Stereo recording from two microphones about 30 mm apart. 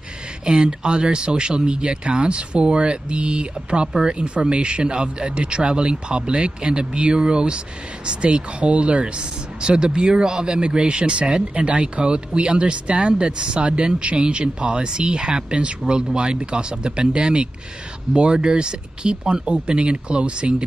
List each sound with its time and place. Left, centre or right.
0.5 s speech: right